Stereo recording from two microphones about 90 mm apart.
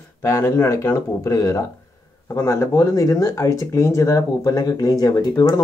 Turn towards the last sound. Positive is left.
turn(degrees=45)  # may be behind; listen again after turning